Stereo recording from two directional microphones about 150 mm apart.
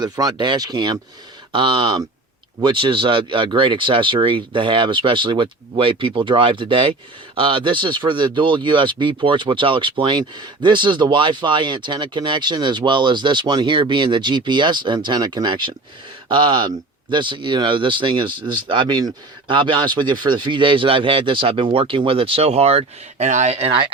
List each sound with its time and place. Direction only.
0.0 s speech: 25° right (ahead or behind)